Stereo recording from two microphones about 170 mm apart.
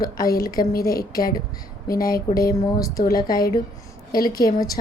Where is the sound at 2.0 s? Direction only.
20° left (ahead or behind).